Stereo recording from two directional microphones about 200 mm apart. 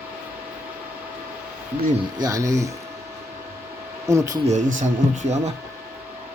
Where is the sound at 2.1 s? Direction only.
15° right (ahead or behind).